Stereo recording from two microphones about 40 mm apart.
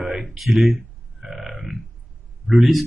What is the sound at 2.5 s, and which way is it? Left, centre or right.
Speech, centre.